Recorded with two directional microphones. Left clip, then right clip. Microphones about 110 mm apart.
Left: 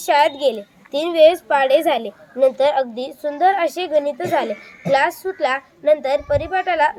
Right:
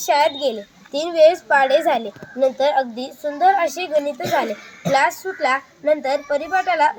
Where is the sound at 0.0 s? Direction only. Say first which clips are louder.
Left 2 dB; 10° left (ahead or behind).